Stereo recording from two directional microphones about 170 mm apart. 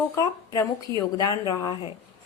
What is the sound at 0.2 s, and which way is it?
A woman's voice, 20° left (ahead or behind).